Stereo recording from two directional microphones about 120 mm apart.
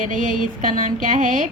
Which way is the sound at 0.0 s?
90° right.